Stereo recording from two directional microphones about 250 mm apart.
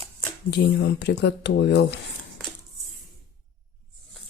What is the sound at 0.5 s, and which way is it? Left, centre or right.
Speech, left.